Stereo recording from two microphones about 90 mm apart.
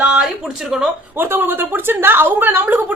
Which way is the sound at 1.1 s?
25° right (ahead or behind).